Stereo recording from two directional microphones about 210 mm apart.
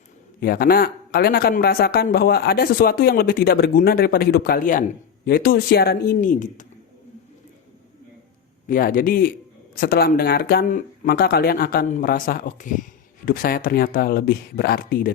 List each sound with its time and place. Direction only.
0.3 s a man's voice: 45° left (ahead or behind)
8.6 s a man's voice: 40° left (ahead or behind)